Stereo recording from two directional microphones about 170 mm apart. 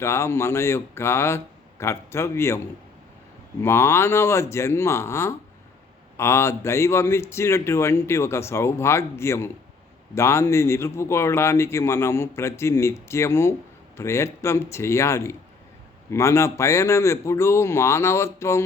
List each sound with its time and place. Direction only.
0.0 s speech: 15° left (ahead or behind)
3.6 s speech: 15° left (ahead or behind)